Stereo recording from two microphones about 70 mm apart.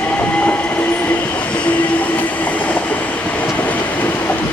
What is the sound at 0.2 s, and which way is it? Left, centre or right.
Train, left.